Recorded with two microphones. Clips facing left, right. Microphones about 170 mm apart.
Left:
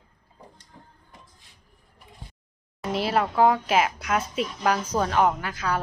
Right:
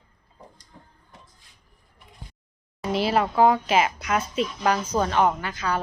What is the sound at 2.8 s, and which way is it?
Speech, centre (ahead or behind).